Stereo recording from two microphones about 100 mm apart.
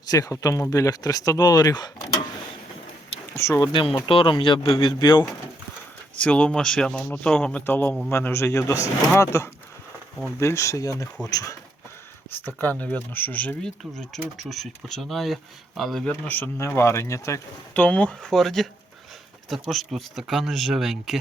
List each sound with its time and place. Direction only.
0.1 s speech: 35° left (ahead or behind)
3.3 s speech: 30° left (ahead or behind)
3.7 s a man's voice: 55° left (ahead or behind)
6.1 s speech: 10° left (ahead or behind); by 11.5 s 35° left (ahead or behind)
12.5 s speech: 15° left (ahead or behind)
13.9 s speech: 5° left (ahead or behind)
16.0 s speech: 15° left (ahead or behind)
17.7 s speech: 15° left (ahead or behind); by 21.2 s 5° right (ahead or behind)